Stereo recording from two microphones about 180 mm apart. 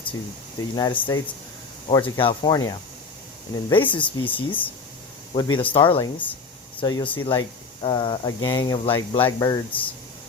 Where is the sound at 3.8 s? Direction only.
10° left (ahead or behind).